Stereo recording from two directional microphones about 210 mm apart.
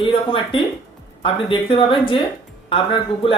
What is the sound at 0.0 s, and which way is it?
Speech, 25° left (ahead or behind).